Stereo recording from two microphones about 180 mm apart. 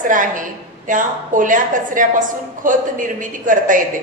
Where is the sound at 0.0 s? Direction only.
45° right (ahead or behind).